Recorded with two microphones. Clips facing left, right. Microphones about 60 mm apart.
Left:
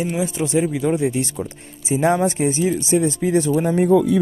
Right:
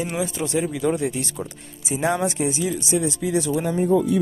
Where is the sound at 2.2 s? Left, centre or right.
Left.